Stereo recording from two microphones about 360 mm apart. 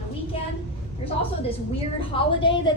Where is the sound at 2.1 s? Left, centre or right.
Centre.